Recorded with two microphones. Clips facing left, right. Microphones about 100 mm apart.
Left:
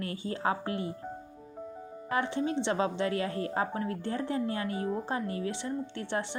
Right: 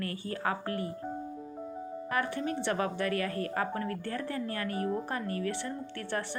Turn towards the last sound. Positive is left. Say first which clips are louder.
# left 2 dB
turn(degrees=20)  # may be behind; listen again after turning